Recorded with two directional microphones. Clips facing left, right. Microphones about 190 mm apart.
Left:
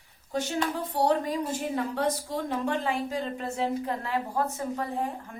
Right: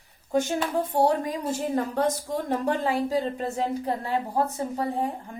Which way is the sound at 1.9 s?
40° right (ahead or behind).